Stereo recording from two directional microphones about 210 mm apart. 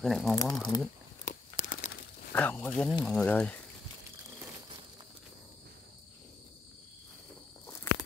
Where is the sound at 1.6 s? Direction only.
35° left (ahead or behind).